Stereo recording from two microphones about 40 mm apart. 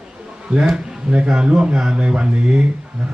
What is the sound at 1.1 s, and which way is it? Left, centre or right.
A man's voice, right.